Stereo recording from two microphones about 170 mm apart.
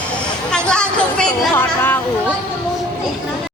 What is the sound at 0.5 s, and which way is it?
Chatter, 5° left (ahead or behind).